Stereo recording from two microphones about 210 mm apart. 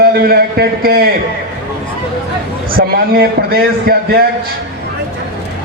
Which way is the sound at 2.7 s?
45° right (ahead or behind).